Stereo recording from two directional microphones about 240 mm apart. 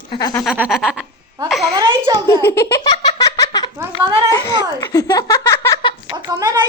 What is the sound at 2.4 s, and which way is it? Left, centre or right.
Giggle, centre.